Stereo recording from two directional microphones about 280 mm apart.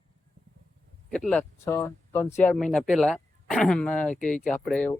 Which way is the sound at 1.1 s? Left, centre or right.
Centre.